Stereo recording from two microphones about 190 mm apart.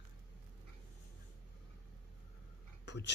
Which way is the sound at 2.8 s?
65° left (ahead or behind).